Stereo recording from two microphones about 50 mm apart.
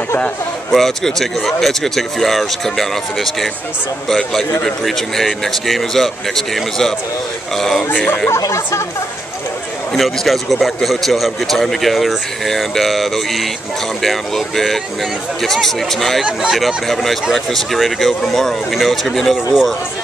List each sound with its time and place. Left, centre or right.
0.7 s a man's voice: centre
4.8 s a man's voice: centre
8.3 s speech: left
9.9 s a man's voice: centre